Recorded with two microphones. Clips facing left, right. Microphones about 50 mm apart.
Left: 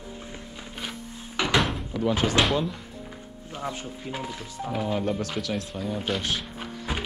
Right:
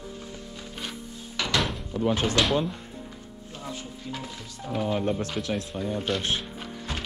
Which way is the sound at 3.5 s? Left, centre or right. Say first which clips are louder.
Left 5 dB; left.